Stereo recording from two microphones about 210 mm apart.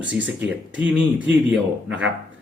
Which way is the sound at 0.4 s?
5° right (ahead or behind).